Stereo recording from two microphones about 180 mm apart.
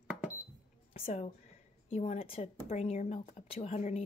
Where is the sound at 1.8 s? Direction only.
35° left (ahead or behind).